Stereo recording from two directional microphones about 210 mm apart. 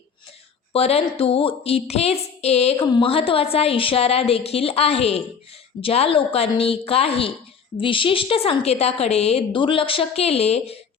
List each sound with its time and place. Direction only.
0.7 s a woman's voice: 30° left (ahead or behind)